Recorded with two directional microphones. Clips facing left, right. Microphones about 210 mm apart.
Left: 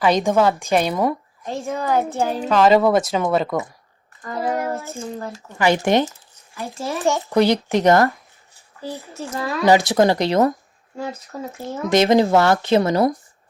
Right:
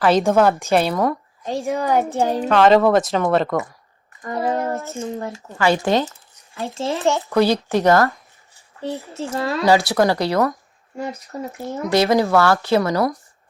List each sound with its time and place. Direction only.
0.0 s speech: centre (ahead or behind)
1.5 s a child's voice: 15° right (ahead or behind)
2.5 s speech: 5° left (ahead or behind)
4.2 s child singing: 15° right (ahead or behind)
4.9 s speech: 20° right (ahead or behind)
5.5 s speech: 20° left (ahead or behind)
6.7 s speech: 20° right (ahead or behind)
7.0 s speech: 15° left (ahead or behind)
9.1 s speech: 25° right (ahead or behind)
9.6 s speech: 20° left (ahead or behind)
11.3 s a child's voice: 15° right (ahead or behind)
11.9 s speech: 20° left (ahead or behind)